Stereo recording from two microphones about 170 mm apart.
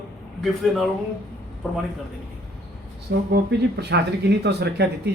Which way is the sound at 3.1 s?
85° right.